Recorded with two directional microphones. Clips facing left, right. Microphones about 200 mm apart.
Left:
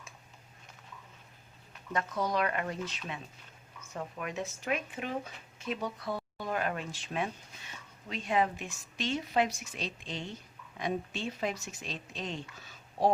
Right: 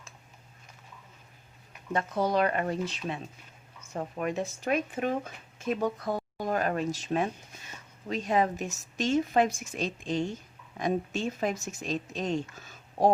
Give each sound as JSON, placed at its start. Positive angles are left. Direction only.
{"t": 1.9, "sound": "a woman's voice", "side_deg": -30}